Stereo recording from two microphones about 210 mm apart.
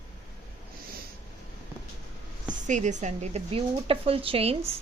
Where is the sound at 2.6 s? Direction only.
35° right (ahead or behind).